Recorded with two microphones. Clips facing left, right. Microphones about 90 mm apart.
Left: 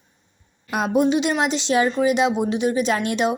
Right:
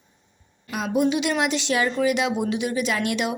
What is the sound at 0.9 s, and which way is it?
Speech, 35° left (ahead or behind).